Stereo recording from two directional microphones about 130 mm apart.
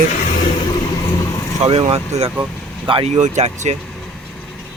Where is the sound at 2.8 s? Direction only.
40° right (ahead or behind).